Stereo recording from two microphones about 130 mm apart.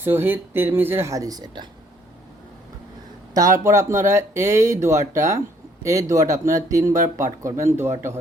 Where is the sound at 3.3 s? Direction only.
25° right (ahead or behind).